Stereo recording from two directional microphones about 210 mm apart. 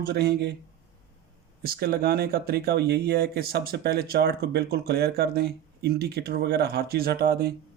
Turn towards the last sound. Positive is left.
turn(degrees=-50)  # may be behind; listen again after turning